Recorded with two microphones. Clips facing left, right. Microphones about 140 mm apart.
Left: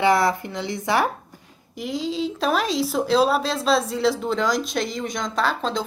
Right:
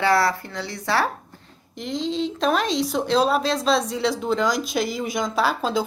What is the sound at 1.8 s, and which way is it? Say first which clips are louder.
Speech: even; 5° left (ahead or behind).